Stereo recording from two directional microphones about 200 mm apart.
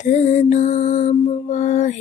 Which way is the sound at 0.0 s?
40° left (ahead or behind).